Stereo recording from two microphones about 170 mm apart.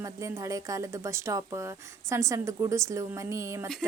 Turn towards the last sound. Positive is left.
turn(degrees=-15)  # may be behind; listen again after turning